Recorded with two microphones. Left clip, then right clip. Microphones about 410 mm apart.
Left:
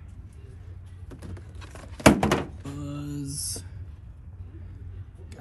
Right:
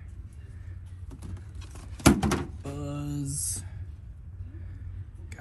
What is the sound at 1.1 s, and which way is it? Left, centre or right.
Thunk, centre.